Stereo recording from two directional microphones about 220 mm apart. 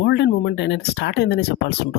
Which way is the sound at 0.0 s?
50° left (ahead or behind).